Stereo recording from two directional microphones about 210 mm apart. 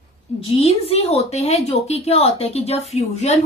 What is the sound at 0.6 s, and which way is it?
A woman's voice, 30° left (ahead or behind).